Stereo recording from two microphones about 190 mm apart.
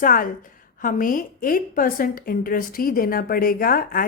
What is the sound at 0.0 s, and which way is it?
A woman's voice, 45° left (ahead or behind).